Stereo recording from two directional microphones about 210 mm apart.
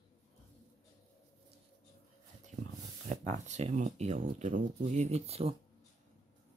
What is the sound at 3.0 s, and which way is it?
Speech, 30° right (ahead or behind).